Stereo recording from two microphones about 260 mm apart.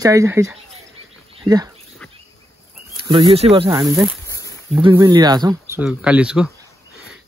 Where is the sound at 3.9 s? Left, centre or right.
Centre.